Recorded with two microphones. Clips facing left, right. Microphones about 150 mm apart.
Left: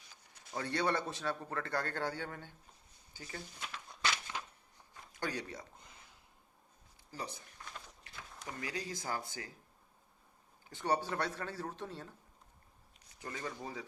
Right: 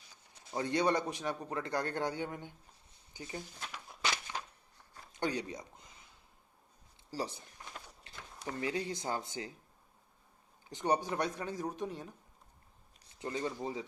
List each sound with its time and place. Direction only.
0.5 s a man's voice: 15° right (ahead or behind)
5.1 s speech: 20° right (ahead or behind)
7.1 s speech: 30° right (ahead or behind)
10.7 s a man's voice: 20° right (ahead or behind)